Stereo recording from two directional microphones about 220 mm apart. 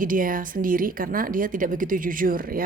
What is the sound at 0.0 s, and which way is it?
A woman's voice, 40° right (ahead or behind).